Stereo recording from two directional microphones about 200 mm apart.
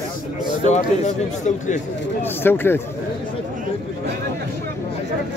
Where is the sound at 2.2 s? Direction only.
10° left (ahead or behind).